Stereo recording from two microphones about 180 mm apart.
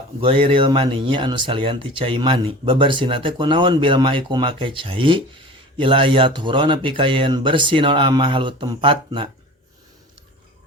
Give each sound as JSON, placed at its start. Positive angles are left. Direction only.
{"t": 0.2, "sound": "speech", "side_deg": -30}